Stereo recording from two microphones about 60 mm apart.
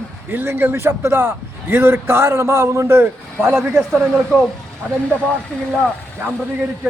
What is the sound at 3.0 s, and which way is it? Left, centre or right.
Speech, right.